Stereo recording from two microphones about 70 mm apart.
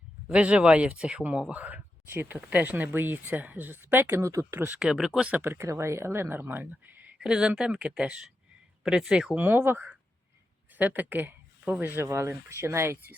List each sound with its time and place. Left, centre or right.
0.3 s speech: centre
4.1 s speech: right
4.8 s speech: centre
5.3 s speech: right
7.2 s speech: centre
9.4 s speech: right